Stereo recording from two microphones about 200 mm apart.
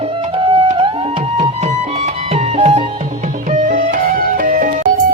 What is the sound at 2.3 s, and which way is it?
Music, 30° right (ahead or behind).